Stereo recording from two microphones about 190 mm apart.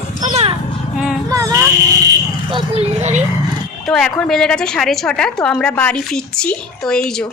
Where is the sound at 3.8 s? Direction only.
5° left (ahead or behind).